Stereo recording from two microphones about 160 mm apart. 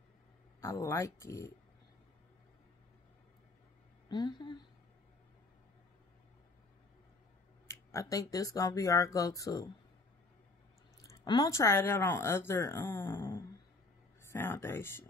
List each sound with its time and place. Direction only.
0.6 s speech: 15° left (ahead or behind)
4.1 s speech: 25° left (ahead or behind)
7.6 s speech: 20° left (ahead or behind)
11.0 s speech: 25° left (ahead or behind)